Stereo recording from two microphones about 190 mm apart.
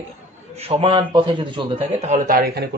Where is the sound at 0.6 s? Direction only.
30° right (ahead or behind).